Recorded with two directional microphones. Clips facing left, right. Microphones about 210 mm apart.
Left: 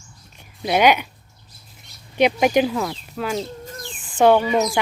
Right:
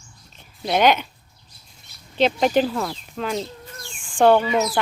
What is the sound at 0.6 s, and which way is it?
Speech, 10° left (ahead or behind).